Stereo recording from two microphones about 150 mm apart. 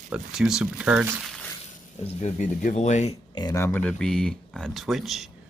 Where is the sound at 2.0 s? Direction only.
50° left (ahead or behind).